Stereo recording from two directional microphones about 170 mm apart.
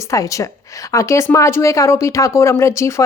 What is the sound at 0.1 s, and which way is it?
Speech, 20° left (ahead or behind).